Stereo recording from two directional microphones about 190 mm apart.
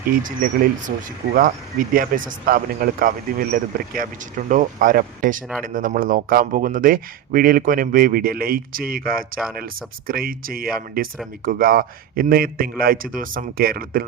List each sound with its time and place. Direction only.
0.1 s speech: 45° right (ahead or behind)